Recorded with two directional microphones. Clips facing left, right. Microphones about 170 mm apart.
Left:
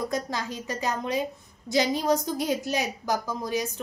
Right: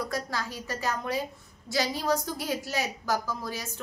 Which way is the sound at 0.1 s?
20° left (ahead or behind).